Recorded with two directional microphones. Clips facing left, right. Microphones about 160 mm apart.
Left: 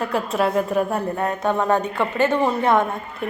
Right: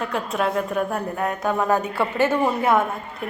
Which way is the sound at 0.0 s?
Centre (ahead or behind).